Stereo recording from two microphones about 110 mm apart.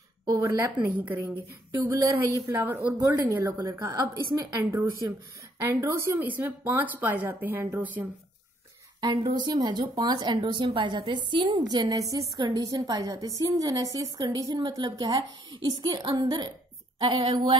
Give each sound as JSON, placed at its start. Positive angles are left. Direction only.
{"t": 0.4, "sound": "a woman's voice", "side_deg": -25}
{"t": 1.8, "sound": "speech", "side_deg": -35}
{"t": 2.5, "sound": "speech", "side_deg": -20}
{"t": 3.0, "sound": "speech", "side_deg": -30}
{"t": 5.6, "sound": "speech", "side_deg": -25}
{"t": 9.0, "sound": "speech", "side_deg": -40}
{"t": 17.0, "sound": "speech", "side_deg": -55}